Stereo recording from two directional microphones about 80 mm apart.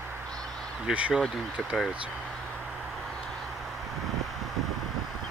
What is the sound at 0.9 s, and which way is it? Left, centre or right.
Speech, centre.